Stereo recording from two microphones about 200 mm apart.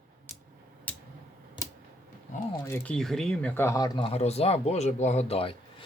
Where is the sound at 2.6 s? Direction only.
10° left (ahead or behind).